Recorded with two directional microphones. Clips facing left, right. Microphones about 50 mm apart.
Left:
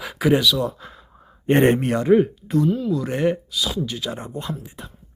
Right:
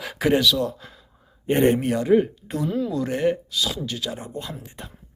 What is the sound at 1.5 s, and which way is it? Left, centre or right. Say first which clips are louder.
Speech: left 2 dB; left.